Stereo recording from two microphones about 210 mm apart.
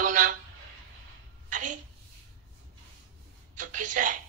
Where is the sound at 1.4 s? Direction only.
40° right (ahead or behind).